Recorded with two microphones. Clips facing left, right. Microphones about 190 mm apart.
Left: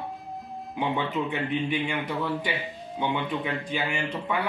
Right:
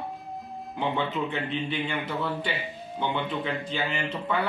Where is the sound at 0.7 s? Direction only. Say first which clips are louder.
Left 1 dB; centre (ahead or behind).